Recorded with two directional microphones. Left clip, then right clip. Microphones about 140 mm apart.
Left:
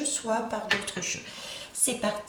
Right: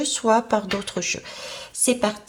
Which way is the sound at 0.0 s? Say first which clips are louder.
Right 9 dB; 25° right (ahead or behind).